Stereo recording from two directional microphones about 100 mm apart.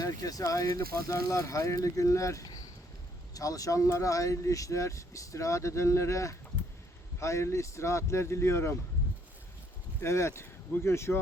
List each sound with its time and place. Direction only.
0.0 s speech: 35° left (ahead or behind)
10.0 s speech: 25° left (ahead or behind)